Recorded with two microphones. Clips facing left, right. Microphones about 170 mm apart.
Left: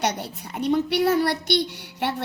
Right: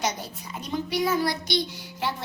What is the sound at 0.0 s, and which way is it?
A child's voice, 70° left (ahead or behind).